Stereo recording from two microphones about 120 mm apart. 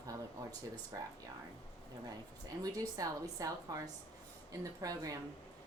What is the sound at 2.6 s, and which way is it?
A woman's voice, 30° right (ahead or behind).